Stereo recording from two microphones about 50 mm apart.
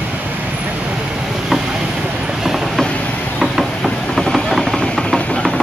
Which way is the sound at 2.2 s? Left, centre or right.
Centre.